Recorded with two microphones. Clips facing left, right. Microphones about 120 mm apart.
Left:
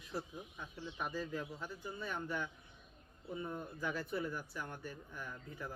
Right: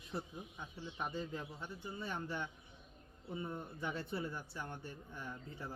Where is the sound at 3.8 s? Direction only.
25° right (ahead or behind).